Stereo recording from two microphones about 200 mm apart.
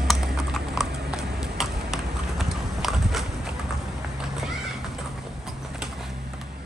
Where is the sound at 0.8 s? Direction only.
55° right (ahead or behind).